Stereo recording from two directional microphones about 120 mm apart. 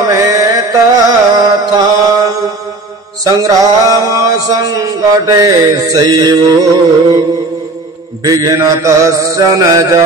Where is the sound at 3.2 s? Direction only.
30° right (ahead or behind).